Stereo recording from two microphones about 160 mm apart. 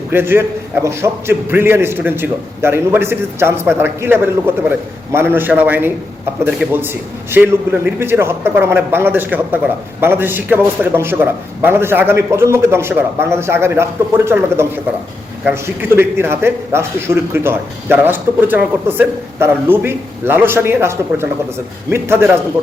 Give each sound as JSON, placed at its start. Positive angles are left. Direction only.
{"t": 0.1, "sound": "a man's voice", "side_deg": -15}
{"t": 16.0, "sound": "a man's voice", "side_deg": -15}